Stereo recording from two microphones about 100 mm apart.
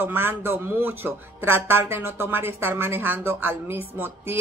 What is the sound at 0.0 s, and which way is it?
Speech, 20° right (ahead or behind).